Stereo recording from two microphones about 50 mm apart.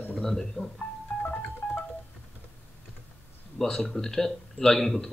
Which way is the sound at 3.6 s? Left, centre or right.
Centre.